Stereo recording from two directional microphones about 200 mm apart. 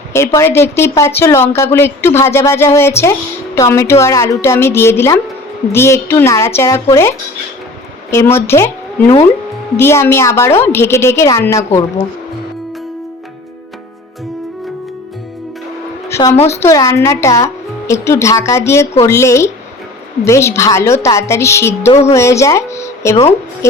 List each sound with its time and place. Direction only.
0.3 s a woman's voice: 15° left (ahead or behind)
16.0 s a sound: 15° left (ahead or behind)
16.5 s speech: 15° left (ahead or behind)
21.8 s a woman's voice: 35° left (ahead or behind)
22.1 s speech: 15° left (ahead or behind)